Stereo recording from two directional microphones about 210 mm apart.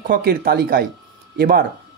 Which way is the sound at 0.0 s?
45° right (ahead or behind).